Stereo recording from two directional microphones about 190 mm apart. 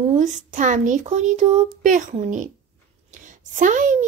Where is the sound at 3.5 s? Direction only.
40° right (ahead or behind).